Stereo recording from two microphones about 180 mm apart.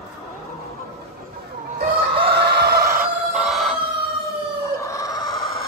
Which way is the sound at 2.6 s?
60° right (ahead or behind).